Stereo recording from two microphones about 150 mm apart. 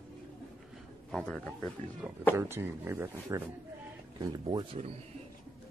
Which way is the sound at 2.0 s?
10° right (ahead or behind).